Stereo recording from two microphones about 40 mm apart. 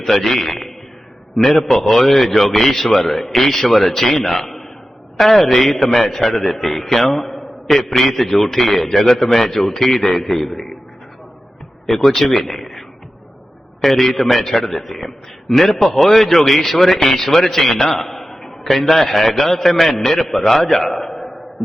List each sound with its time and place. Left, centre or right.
0.0 s a man's voice: centre
11.9 s a man's voice: centre
13.8 s a man's voice: centre
20.8 s a sound: centre